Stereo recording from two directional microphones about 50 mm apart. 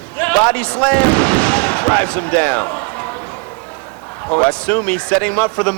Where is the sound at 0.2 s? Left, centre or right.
Left.